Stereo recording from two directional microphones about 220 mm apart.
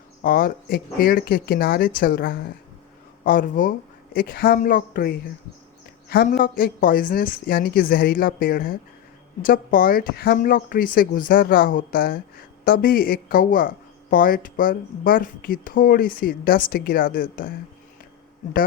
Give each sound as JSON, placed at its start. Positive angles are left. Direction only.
{"t": 0.2, "sound": "speech", "side_deg": 40}